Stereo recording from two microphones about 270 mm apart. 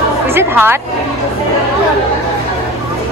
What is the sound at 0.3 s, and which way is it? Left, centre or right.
Speech, centre.